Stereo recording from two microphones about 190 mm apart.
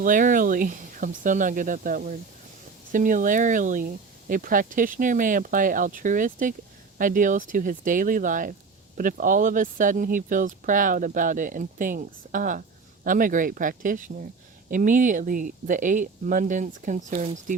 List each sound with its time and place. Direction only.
0.0 s speech: 45° right (ahead or behind)